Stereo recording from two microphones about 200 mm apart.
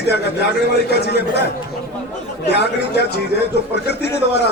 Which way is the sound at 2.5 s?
55° left (ahead or behind).